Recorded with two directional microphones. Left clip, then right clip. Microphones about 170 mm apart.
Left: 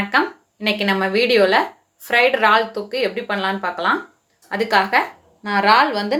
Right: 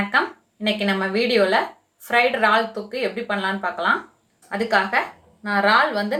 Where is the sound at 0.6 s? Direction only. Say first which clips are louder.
Left 3 dB; 30° left (ahead or behind).